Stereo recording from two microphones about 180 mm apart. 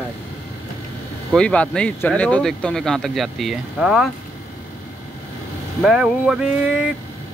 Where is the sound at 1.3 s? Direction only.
5° left (ahead or behind).